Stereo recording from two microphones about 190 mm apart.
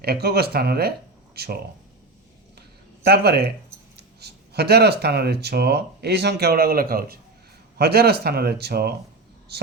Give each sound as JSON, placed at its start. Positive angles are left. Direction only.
{"t": 0.0, "sound": "speech", "side_deg": -55}
{"t": 2.6, "sound": "a sound", "side_deg": -55}
{"t": 3.9, "sound": "speech", "side_deg": -60}